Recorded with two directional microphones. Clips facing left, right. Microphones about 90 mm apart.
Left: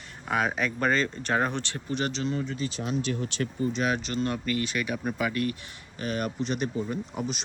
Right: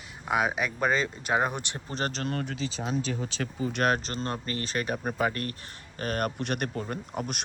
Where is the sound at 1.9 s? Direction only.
40° right (ahead or behind).